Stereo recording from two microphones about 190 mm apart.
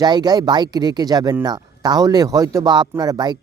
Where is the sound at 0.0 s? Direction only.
20° right (ahead or behind).